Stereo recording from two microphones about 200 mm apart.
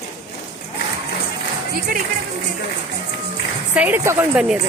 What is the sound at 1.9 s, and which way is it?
Speech, 45° right (ahead or behind).